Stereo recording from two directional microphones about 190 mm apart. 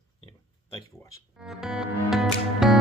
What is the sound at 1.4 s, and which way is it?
Music, 5° right (ahead or behind).